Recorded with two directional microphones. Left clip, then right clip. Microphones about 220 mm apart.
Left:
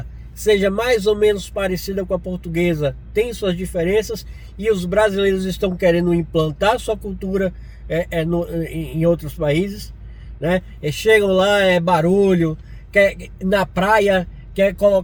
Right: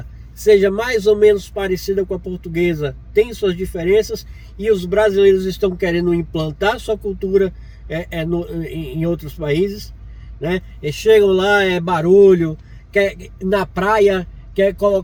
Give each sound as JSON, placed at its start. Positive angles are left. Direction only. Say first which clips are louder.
{"t": 0.4, "sound": "speech", "louder": "right 3 dB", "side_deg": 20}
{"t": 13.4, "sound": "speech", "louder": "even", "side_deg": 25}